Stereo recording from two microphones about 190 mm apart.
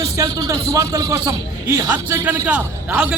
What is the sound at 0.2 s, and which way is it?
A man's voice, 15° right (ahead or behind).